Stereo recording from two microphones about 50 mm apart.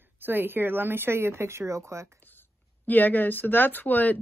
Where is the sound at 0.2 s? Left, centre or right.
Right.